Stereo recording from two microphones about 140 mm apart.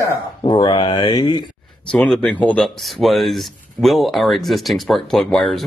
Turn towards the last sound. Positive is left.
turn(degrees=5)  # may be behind; listen again after turning